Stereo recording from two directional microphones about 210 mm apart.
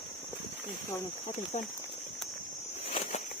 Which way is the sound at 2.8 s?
30° left (ahead or behind).